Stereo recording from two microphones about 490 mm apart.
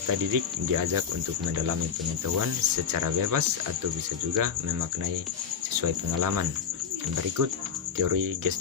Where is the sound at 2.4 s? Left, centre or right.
Right.